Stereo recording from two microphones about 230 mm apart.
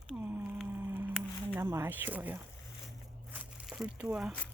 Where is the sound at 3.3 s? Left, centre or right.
Centre.